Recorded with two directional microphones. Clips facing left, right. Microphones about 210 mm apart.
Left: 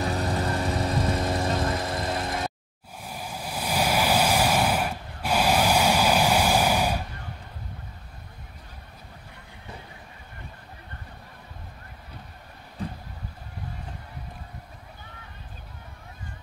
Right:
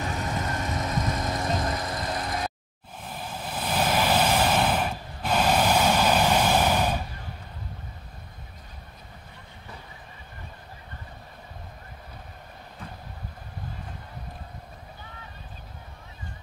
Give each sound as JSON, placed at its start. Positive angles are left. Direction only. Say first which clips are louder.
{"t": 0.0, "sound": "vehicle", "louder": "left 4 dB", "side_deg": 35}
{"t": 3.0, "sound": "vehicle", "louder": "even", "side_deg": 10}